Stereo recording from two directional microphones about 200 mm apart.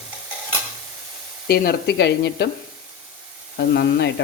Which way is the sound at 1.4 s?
50° left (ahead or behind).